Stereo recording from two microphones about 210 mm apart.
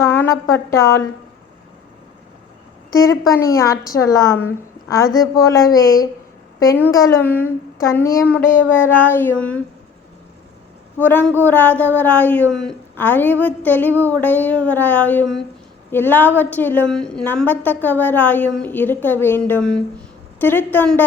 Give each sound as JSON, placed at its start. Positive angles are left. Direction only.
{"t": 0.0, "sound": "a woman's voice", "side_deg": 10}
{"t": 2.9, "sound": "speech", "side_deg": 15}
{"t": 10.9, "sound": "speech", "side_deg": 10}